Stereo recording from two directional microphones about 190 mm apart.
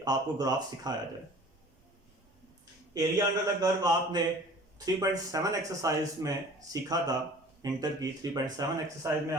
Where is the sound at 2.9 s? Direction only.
20° right (ahead or behind).